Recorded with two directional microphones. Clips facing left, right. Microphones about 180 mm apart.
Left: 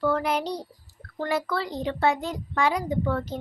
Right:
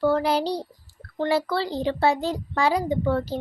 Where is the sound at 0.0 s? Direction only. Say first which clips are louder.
Right 3 dB; 30° right (ahead or behind).